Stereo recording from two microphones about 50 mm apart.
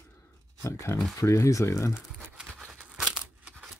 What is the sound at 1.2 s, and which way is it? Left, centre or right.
Speech, left.